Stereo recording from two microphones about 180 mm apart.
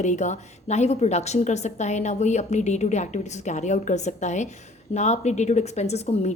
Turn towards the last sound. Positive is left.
turn(degrees=35)  # may be behind; listen again after turning